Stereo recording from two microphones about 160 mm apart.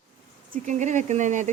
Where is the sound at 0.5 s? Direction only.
50° right (ahead or behind).